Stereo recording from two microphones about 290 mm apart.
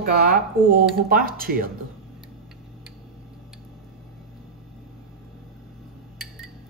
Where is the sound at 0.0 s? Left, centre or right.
Right.